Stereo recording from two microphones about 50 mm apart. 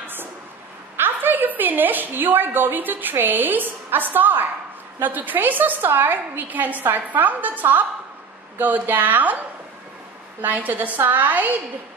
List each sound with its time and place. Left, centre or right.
0.0 s a sound: right
0.9 s a woman's voice: right
10.4 s a woman's voice: right